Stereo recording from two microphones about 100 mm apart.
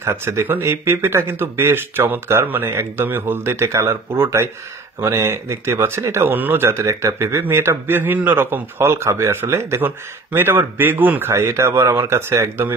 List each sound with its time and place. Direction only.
0.0 s speech: 25° right (ahead or behind)